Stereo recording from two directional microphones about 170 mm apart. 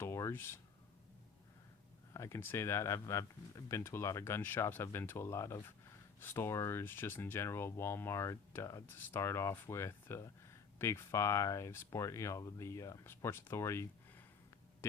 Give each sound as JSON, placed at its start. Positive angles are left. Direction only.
{"t": 0.0, "sound": "speech", "side_deg": 15}
{"t": 2.1, "sound": "speech", "side_deg": 15}